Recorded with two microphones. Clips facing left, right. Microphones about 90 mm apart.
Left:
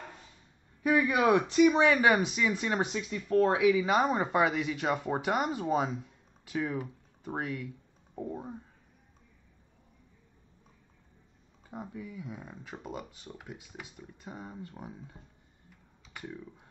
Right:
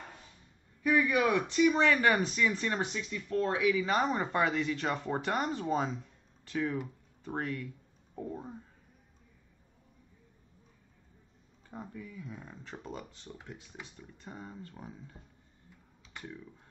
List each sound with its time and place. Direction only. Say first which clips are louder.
0.8 s speech: left 2 dB; 20° left (ahead or behind)
3.1 s speech: left 7 dB; 30° left (ahead or behind); by 8.5 s 10° left (ahead or behind)
11.7 s speech: left 3 dB; 10° left (ahead or behind)
16.2 s speech: left 3 dB; 10° left (ahead or behind)